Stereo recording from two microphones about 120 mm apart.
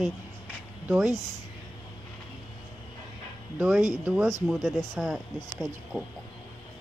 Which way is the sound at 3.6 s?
5° right (ahead or behind).